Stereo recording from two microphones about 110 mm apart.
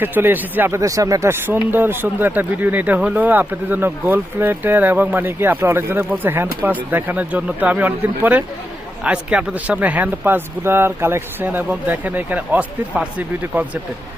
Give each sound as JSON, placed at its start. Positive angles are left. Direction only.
{"t": 0.0, "sound": "speech", "side_deg": -20}
{"t": 0.8, "sound": "speech", "side_deg": -30}